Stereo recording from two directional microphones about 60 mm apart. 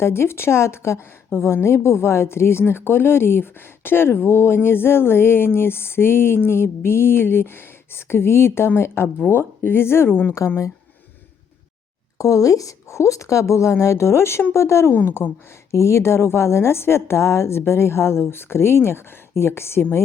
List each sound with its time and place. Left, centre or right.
0.0 s a woman's voice: left
1.6 s a sound: left
10.4 s speech: left
12.1 s a woman's voice: left
14.9 s a sound: left
15.7 s a woman's voice: left